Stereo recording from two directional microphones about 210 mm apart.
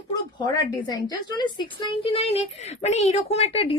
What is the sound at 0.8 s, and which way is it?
Speech, 20° left (ahead or behind).